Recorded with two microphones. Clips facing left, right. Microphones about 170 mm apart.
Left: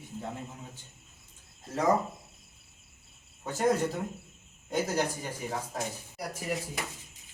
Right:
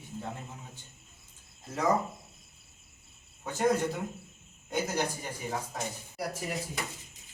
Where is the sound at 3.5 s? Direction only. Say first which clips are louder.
Even; centre (ahead or behind).